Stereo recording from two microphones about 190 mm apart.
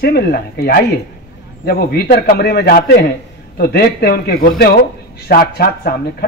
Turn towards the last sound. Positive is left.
turn(degrees=55)  # may be behind; listen again after turning